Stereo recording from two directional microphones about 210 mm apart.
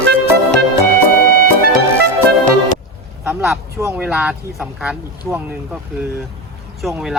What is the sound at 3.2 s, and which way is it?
Speech, centre (ahead or behind).